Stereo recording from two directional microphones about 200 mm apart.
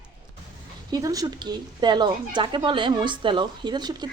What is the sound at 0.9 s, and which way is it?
Speech, 20° right (ahead or behind).